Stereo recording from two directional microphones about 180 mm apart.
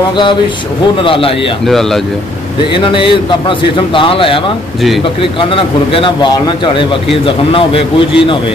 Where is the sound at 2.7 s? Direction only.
30° left (ahead or behind).